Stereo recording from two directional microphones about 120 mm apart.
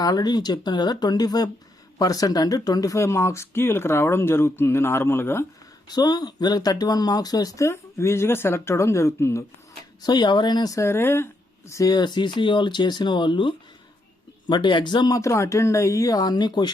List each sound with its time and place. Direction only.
0.0 s speech: 35° left (ahead or behind)
5.9 s speech: 35° left (ahead or behind)
10.0 s speech: 35° left (ahead or behind); by 11.3 s 20° left (ahead or behind)
11.7 s speech: 30° left (ahead or behind)